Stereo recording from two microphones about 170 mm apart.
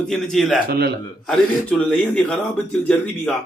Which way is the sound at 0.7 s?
65° right (ahead or behind).